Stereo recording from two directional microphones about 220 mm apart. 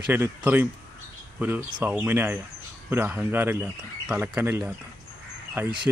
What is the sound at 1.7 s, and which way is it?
Speech, 5° right (ahead or behind).